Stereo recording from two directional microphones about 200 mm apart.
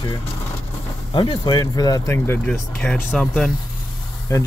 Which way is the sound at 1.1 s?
20° left (ahead or behind).